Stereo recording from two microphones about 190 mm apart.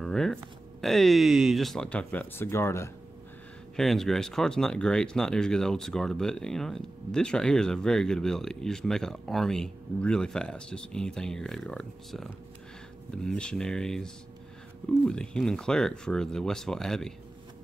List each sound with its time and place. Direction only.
0.0 s a sound: 5° left (ahead or behind)
0.7 s speech: centre (ahead or behind)
3.7 s speech: centre (ahead or behind)